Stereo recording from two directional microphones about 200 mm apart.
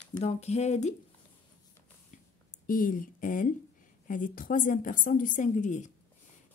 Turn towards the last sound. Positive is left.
turn(degrees=40)  # may be behind; listen again after turning